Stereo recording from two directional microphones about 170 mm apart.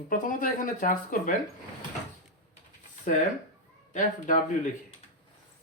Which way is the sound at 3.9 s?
50° left (ahead or behind).